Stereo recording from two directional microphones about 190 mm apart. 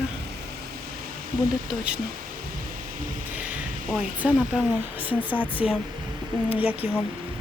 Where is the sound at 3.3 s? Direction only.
5° right (ahead or behind).